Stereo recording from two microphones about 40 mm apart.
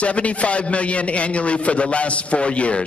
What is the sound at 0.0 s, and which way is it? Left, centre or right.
A man's voice, left.